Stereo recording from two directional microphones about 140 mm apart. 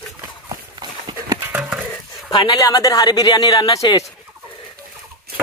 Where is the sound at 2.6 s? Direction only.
25° left (ahead or behind).